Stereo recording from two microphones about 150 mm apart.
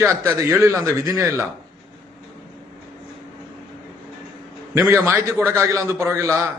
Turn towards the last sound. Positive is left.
turn(degrees=-15)  # may be behind; listen again after turning